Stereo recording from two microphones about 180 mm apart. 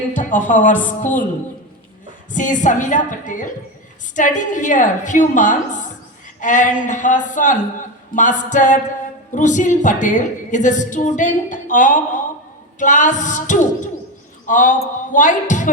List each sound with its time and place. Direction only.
0.1 s a woman's voice: 45° left (ahead or behind)
2.3 s a woman's voice: 45° left (ahead or behind)